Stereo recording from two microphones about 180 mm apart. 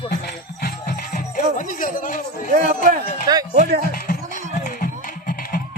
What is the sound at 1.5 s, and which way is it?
Speech, 50° left (ahead or behind).